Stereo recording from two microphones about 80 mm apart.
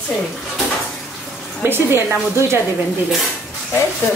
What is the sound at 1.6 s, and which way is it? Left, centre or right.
Speech, right.